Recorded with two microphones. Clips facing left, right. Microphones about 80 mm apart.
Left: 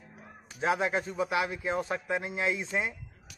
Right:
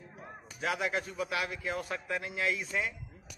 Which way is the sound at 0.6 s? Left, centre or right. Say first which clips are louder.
Left 5 dB; left.